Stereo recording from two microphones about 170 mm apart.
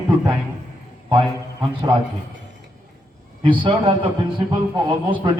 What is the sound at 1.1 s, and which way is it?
Speech, 30° right (ahead or behind).